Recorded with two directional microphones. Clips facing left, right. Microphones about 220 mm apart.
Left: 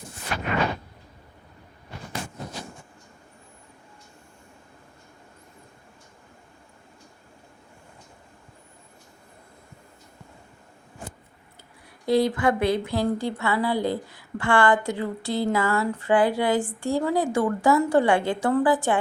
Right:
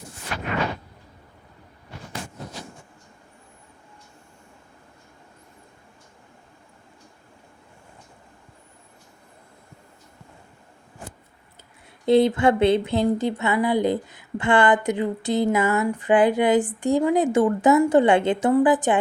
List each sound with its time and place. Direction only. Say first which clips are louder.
12.0 s speech: right 4 dB; 25° right (ahead or behind)